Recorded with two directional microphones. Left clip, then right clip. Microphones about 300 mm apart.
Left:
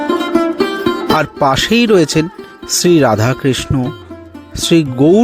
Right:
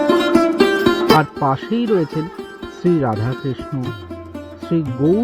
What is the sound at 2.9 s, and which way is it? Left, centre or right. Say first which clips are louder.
Speech: left 8 dB; left.